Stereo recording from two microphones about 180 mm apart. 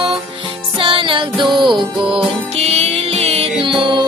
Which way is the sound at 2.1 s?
35° right (ahead or behind).